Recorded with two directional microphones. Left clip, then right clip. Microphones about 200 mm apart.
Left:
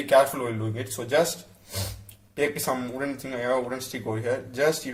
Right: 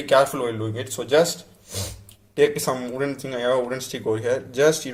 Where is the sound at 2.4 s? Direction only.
25° right (ahead or behind).